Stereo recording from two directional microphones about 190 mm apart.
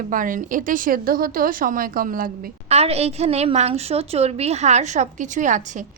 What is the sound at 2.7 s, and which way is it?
A woman's voice, 35° right (ahead or behind).